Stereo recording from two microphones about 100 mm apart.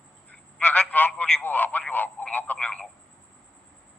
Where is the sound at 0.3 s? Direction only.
15° left (ahead or behind).